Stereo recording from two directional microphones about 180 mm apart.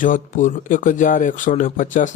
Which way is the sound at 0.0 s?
45° left (ahead or behind).